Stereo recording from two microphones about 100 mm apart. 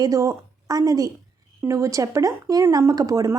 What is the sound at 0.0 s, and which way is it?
A woman's voice, 35° right (ahead or behind).